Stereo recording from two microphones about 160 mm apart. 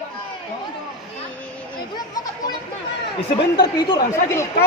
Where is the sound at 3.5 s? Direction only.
25° left (ahead or behind).